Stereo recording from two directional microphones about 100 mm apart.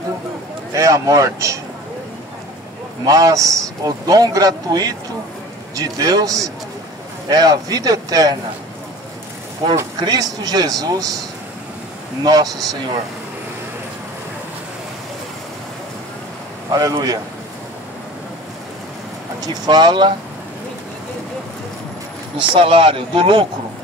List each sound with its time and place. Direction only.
0.7 s a man's voice: 30° right (ahead or behind)
3.1 s a man's voice: 35° right (ahead or behind)
9.8 s a man's voice: 40° right (ahead or behind)
16.7 s a man's voice: 40° right (ahead or behind)
19.4 s speech: 45° right (ahead or behind)
22.4 s speech: 60° right (ahead or behind)